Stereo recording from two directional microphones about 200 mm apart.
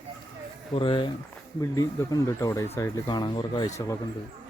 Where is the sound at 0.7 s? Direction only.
25° left (ahead or behind).